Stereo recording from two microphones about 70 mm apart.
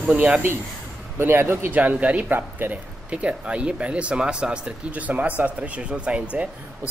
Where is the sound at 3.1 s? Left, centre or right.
Centre.